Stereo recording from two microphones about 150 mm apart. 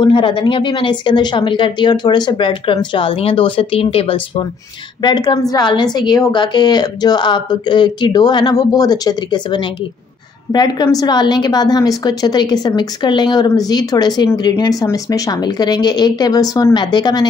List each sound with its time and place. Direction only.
0.0 s a woman's voice: 35° left (ahead or behind)